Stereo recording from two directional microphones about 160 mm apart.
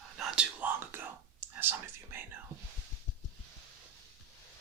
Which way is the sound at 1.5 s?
10° right (ahead or behind).